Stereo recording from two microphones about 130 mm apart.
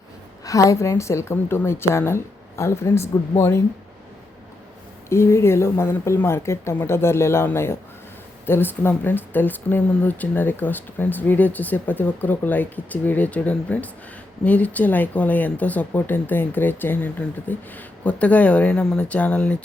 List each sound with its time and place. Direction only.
0.4 s a woman's voice: 25° left (ahead or behind)
5.0 s a woman's voice: 20° left (ahead or behind)